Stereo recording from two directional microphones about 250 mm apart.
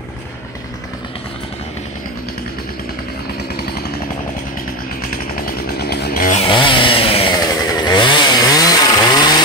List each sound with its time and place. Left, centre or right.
5.0 s motorcycle: left
6.4 s chainsaw: centre